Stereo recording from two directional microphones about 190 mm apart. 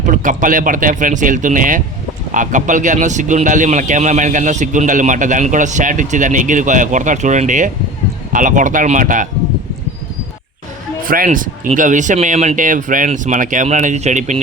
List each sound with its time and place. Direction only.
0.0 s a man's voice: 45° right (ahead or behind)
11.0 s a man's voice: 50° right (ahead or behind)